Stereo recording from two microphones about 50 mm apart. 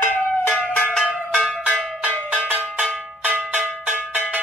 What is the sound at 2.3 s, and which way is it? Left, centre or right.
Cowbell, right.